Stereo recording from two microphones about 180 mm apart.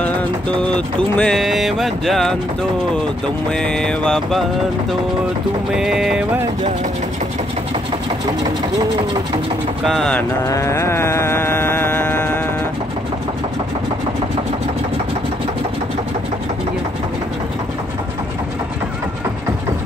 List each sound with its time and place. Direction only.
0.6 s music: 5° left (ahead or behind)
3.5 s music: 5° left (ahead or behind)
5.7 s music: 5° right (ahead or behind)
9.8 s music: 5° left (ahead or behind)
10.4 s music: 15° left (ahead or behind)